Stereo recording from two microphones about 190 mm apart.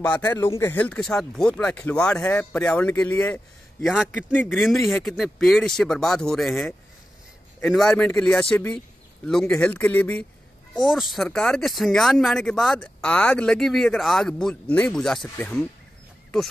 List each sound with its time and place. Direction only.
0.1 s speech: 10° left (ahead or behind)